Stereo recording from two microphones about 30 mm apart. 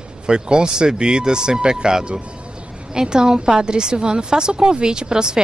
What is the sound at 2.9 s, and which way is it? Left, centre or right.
Speech, right.